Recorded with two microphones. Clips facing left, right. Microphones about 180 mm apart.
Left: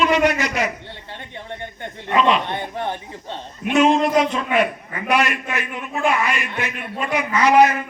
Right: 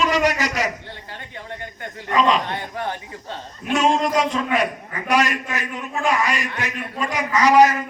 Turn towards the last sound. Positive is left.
turn(degrees=-40)  # may be behind; listen again after turning